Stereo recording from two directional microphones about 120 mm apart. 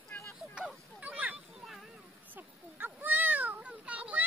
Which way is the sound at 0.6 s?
10° right (ahead or behind).